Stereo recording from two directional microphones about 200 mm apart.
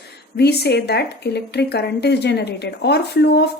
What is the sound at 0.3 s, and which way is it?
Speech, 55° left (ahead or behind).